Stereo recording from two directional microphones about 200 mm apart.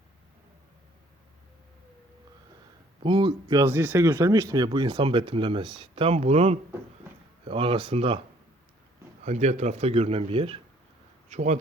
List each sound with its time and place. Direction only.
3.0 s speech: 25° right (ahead or behind)
9.2 s speech: 35° right (ahead or behind)